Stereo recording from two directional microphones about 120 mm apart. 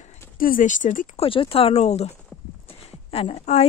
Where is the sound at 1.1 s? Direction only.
50° left (ahead or behind); by 2.1 s 65° left (ahead or behind).